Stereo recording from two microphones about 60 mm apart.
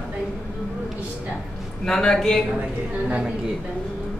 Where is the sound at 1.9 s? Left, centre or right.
Centre.